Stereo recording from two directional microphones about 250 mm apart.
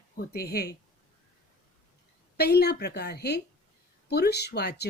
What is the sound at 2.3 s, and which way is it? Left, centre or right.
Speech, left.